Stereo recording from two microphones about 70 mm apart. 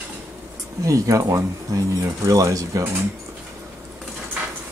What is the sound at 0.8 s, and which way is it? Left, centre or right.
Speech, right.